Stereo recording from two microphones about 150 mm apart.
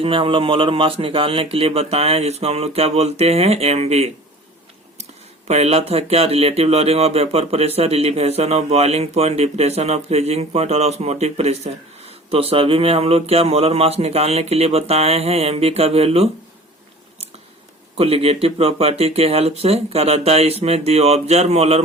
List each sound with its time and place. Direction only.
0.0 s speech: 35° right (ahead or behind)
5.5 s speech: 45° right (ahead or behind)
17.9 s speech: 40° right (ahead or behind)